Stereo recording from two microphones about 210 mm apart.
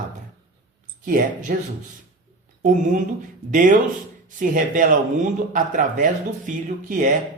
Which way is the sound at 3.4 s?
40° right (ahead or behind).